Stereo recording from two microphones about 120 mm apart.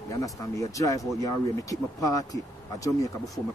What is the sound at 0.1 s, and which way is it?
Speech, 30° left (ahead or behind).